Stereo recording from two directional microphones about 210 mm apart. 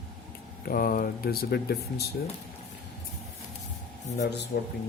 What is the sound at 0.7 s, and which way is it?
Speech, 45° left (ahead or behind).